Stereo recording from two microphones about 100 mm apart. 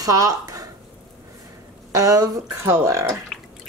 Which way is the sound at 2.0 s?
35° right (ahead or behind).